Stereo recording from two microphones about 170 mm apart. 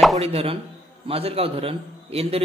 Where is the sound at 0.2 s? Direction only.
35° right (ahead or behind).